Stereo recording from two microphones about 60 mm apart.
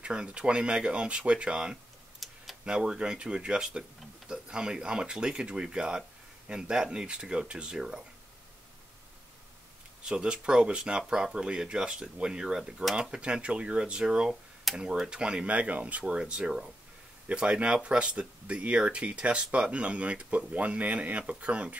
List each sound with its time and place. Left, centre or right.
0.0 s speech: centre
2.2 s tick-tock: centre
2.6 s speech: centre
10.0 s speech: centre